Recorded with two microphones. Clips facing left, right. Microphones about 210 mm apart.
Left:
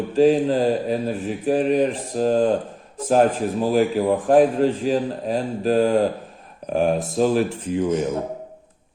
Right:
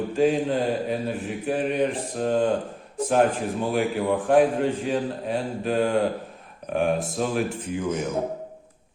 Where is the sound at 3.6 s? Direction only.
35° left (ahead or behind).